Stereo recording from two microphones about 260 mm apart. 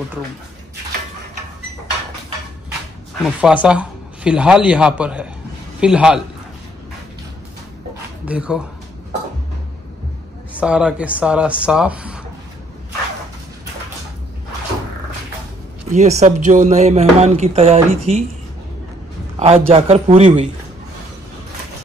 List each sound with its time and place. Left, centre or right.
3.3 s a man's voice: centre
8.3 s speech: centre
10.6 s speech: centre
15.9 s speech: right
19.4 s speech: right